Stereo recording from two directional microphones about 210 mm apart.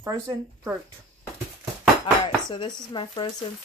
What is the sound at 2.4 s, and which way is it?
Speech, 20° left (ahead or behind).